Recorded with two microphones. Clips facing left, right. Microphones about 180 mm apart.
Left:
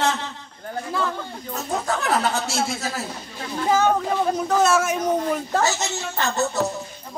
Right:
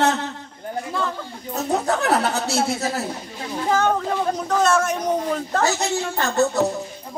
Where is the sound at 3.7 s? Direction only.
5° left (ahead or behind).